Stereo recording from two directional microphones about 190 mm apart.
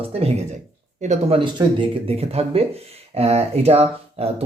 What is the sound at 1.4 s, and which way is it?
Speech, 25° right (ahead or behind).